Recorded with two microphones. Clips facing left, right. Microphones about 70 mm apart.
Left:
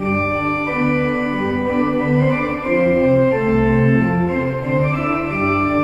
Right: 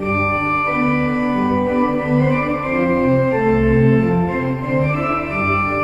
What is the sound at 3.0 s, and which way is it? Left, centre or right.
Organ, centre.